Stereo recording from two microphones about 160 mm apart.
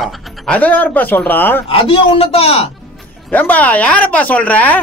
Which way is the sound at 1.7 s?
35° left (ahead or behind).